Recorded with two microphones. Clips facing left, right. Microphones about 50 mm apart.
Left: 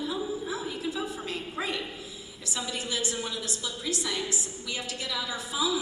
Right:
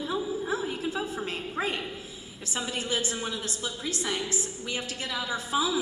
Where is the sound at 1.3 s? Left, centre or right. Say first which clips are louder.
Right 2 dB; right.